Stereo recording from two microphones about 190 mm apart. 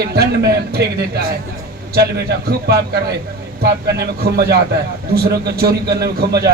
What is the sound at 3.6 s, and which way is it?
A man's voice, 60° right (ahead or behind).